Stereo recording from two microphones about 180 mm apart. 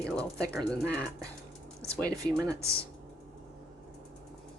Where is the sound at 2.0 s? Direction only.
20° right (ahead or behind).